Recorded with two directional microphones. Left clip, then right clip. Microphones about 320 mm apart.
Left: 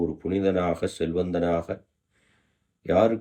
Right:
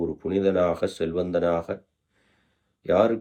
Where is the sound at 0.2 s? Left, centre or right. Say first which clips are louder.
Right 5 dB; centre.